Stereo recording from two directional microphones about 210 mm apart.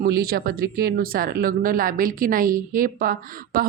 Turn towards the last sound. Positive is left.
turn(degrees=-45)  # may be behind; listen again after turning